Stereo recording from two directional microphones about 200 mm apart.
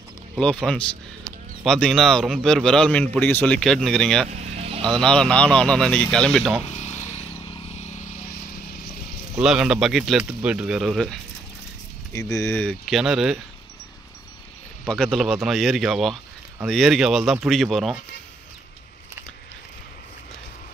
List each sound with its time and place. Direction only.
0.4 s speech: 5° left (ahead or behind)
4.4 s vehicle: 30° right (ahead or behind)
4.8 s speech: 5° left (ahead or behind)
6.6 s vehicle: 35° left (ahead or behind)
9.4 s speech: 5° right (ahead or behind)
12.1 s speech: 15° left (ahead or behind); by 13.4 s centre (ahead or behind)
14.9 s speech: centre (ahead or behind)